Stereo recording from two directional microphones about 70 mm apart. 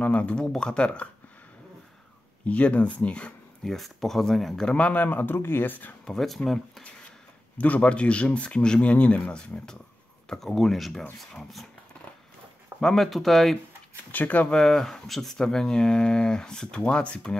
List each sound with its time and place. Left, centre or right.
0.0 s speech: left
2.4 s speech: centre
3.6 s speech: centre
4.7 s speech: left
6.0 s speech: centre
7.5 s speech: left
10.3 s speech: centre
12.8 s speech: centre
14.1 s speech: left
14.5 s speech: centre